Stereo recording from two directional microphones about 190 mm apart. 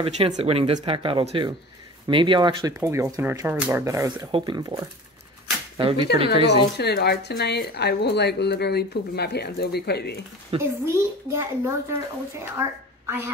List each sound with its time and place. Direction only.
0.0 s speech: 30° right (ahead or behind)
6.1 s speech: 30° right (ahead or behind)
6.8 s speech: 60° left (ahead or behind)
10.6 s a woman's voice: 15° right (ahead or behind)